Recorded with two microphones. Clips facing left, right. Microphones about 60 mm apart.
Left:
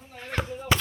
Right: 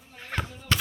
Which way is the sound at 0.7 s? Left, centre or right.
Centre.